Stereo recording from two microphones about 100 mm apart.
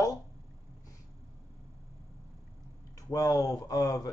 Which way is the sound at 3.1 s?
35° left (ahead or behind).